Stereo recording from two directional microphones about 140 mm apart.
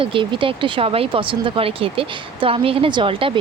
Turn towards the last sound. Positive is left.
turn(degrees=-40)  # may be behind; listen again after turning